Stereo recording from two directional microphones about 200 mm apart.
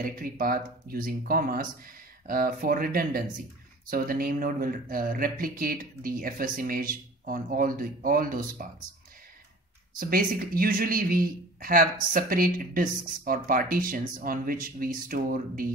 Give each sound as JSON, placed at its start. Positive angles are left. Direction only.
{"t": 0.0, "sound": "speech", "side_deg": -45}
{"t": 9.9, "sound": "speech", "side_deg": -45}